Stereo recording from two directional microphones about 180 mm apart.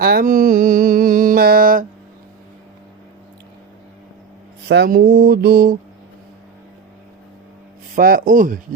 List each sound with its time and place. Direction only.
0.0 s a sound: 55° right (ahead or behind)
4.7 s mantra: 65° right (ahead or behind)
7.9 s speech: 55° right (ahead or behind)